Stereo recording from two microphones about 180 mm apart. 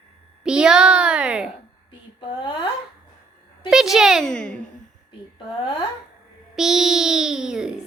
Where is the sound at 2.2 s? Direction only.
25° left (ahead or behind).